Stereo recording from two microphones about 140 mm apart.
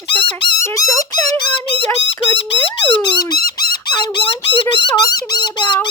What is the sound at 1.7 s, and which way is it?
Speech, 40° right (ahead or behind).